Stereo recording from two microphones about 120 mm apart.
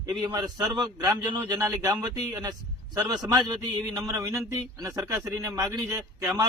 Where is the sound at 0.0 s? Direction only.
35° right (ahead or behind).